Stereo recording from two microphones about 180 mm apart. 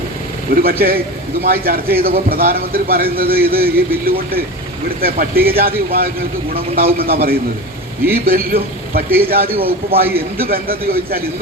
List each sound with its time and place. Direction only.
0.5 s a man's voice: 55° right (ahead or behind)
9.0 s a man's voice: 10° right (ahead or behind)
9.3 s a man's voice: 55° right (ahead or behind)